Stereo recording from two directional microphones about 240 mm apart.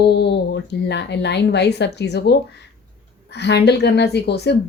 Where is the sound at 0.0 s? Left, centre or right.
Left.